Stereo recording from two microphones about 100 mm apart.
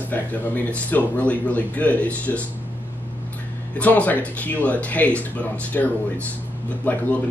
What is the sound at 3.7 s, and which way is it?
A man's voice, 15° left (ahead or behind).